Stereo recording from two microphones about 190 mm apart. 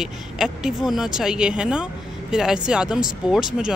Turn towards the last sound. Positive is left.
turn(degrees=-5)  # may be behind; listen again after turning